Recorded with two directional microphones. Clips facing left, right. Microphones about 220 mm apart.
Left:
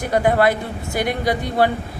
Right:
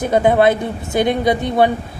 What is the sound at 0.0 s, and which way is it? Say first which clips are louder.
Speech: right 4 dB; 20° right (ahead or behind).